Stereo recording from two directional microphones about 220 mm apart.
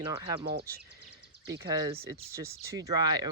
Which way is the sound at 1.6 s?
15° right (ahead or behind).